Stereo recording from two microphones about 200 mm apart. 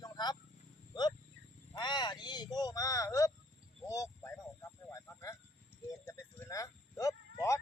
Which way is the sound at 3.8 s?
15° left (ahead or behind).